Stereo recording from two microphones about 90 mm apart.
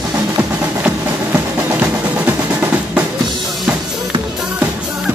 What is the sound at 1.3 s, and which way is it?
Music, 20° right (ahead or behind).